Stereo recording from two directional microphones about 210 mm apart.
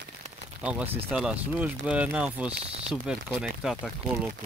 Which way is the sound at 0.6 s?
5° right (ahead or behind).